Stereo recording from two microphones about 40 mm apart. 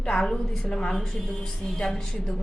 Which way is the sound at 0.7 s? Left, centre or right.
Left.